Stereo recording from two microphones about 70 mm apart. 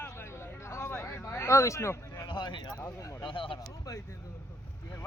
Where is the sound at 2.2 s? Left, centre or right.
Left.